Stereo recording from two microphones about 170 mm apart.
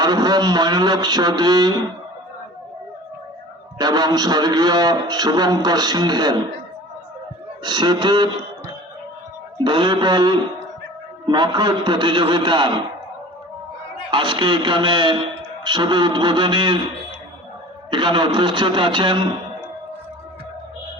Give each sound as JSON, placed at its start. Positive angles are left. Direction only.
{"t": 0.0, "sound": "a man's voice", "side_deg": -25}
{"t": 3.8, "sound": "a man's voice", "side_deg": -25}
{"t": 7.6, "sound": "a man's voice", "side_deg": -25}
{"t": 9.6, "sound": "a man's voice", "side_deg": -30}
{"t": 14.1, "sound": "a man's voice", "side_deg": -30}
{"t": 17.9, "sound": "a man's voice", "side_deg": -25}